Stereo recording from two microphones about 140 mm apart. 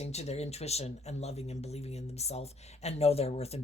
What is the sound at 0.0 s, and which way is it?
A woman's voice, 50° left (ahead or behind).